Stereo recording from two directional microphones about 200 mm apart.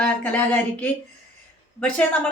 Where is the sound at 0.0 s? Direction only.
10° left (ahead or behind).